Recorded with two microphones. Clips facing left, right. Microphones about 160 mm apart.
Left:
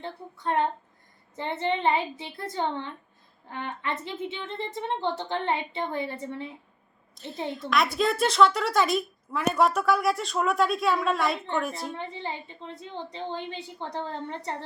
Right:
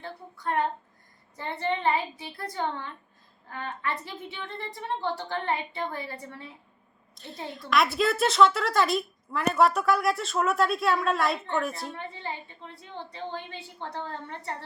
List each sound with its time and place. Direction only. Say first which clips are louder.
0.0 s a woman's voice: left 2 dB; 25° left (ahead or behind)
7.2 s a woman's voice: left 5 dB; centre (ahead or behind)
11.9 s a woman's voice: left 2 dB; 20° left (ahead or behind)